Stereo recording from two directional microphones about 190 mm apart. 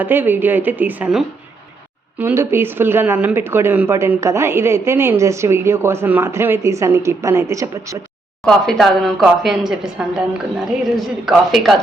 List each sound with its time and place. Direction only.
0.0 s speech: 10° right (ahead or behind)
8.4 s a woman's voice: centre (ahead or behind)